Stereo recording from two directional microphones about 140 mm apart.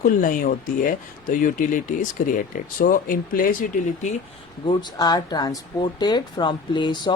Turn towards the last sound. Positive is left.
turn(degrees=35)  # may be behind; listen again after turning